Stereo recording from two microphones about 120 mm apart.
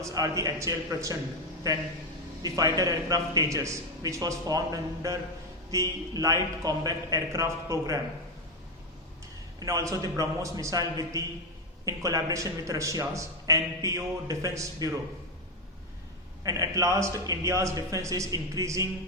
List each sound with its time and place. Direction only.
0.0 s a man's voice: 30° right (ahead or behind)
9.6 s a man's voice: 30° right (ahead or behind)
16.4 s a man's voice: 30° right (ahead or behind)